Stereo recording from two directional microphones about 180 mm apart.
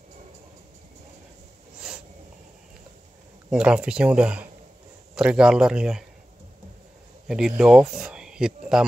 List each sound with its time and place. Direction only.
3.4 s speech: 5° right (ahead or behind)
7.2 s speech: 5° right (ahead or behind)